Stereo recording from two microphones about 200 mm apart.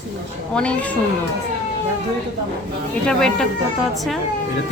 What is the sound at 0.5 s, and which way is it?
Speech, 5° left (ahead or behind).